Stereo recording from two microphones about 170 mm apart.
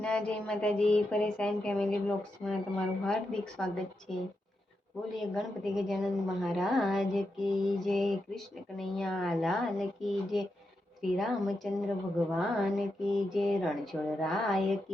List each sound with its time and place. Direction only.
0.0 s a woman's voice: 5° left (ahead or behind)
5.1 s a woman's voice: centre (ahead or behind)